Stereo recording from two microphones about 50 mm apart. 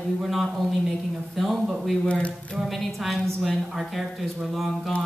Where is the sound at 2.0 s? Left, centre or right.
Left.